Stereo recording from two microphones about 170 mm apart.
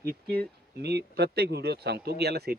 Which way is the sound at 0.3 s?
70° right (ahead or behind).